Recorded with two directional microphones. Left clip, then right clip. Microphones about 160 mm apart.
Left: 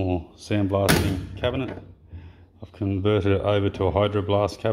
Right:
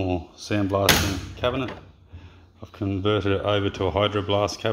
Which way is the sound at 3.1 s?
30° left (ahead or behind).